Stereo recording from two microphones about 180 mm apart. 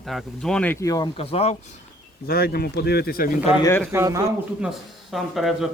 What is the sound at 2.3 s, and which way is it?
Speech, 60° left (ahead or behind).